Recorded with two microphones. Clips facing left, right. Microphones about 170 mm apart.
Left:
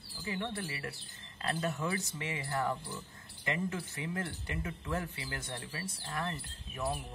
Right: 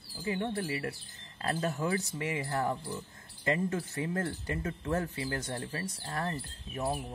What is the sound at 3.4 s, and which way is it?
Speech, 35° right (ahead or behind).